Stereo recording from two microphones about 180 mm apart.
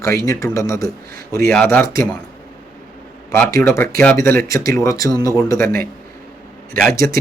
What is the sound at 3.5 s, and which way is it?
Speech, 15° left (ahead or behind).